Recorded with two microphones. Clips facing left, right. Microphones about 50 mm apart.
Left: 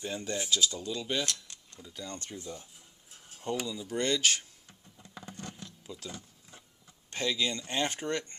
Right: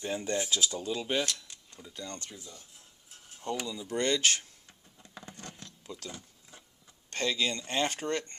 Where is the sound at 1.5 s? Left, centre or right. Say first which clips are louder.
Even; centre.